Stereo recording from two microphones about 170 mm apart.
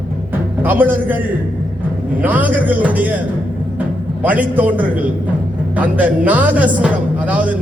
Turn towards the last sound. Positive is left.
turn(degrees=-10)  # may be behind; listen again after turning